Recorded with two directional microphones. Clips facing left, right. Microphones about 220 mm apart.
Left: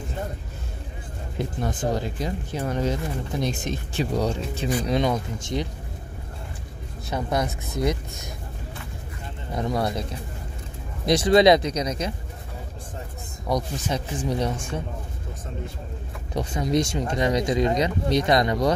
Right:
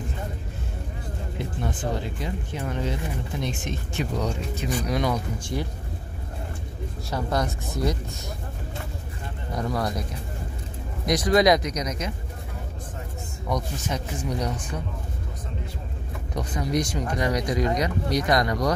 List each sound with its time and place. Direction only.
1.6 s speech: 40° left (ahead or behind); by 5.7 s 20° left (ahead or behind)
7.1 s speech: 20° left (ahead or behind)
9.5 s speech: 25° left (ahead or behind)
11.1 s speech: 30° left (ahead or behind)
13.5 s speech: 30° left (ahead or behind)
16.3 s speech: 25° left (ahead or behind)